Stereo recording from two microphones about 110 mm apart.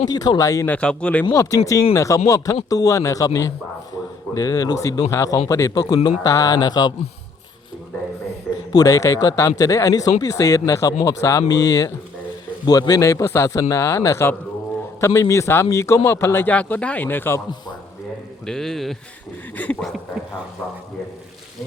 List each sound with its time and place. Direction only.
0.1 s speech: 35° left (ahead or behind)
0.7 s a man's voice: 10° left (ahead or behind)
1.2 s speech: 30° left (ahead or behind)
8.7 s speech: 35° left (ahead or behind)
18.4 s speech: 5° left (ahead or behind)
19.6 s a man's voice: 15° left (ahead or behind)